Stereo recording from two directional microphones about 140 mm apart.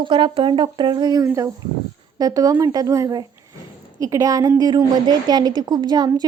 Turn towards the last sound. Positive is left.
turn(degrees=-30)  # may be behind; listen again after turning